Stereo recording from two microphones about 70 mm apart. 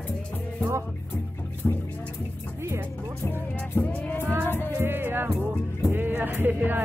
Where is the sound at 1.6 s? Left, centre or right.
Centre.